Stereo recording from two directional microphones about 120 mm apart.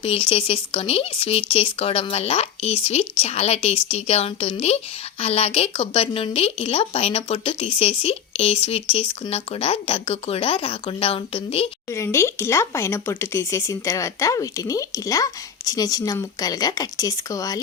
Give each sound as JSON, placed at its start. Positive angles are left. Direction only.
{"t": 0.0, "sound": "speech", "side_deg": 50}
{"t": 11.9, "sound": "speech", "side_deg": 25}